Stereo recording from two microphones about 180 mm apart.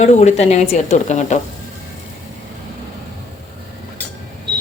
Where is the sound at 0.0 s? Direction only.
40° left (ahead or behind).